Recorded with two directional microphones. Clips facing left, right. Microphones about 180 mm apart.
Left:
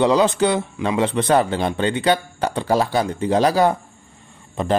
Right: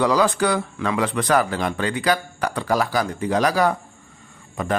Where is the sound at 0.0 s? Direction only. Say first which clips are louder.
Left 3 dB; 25° left (ahead or behind).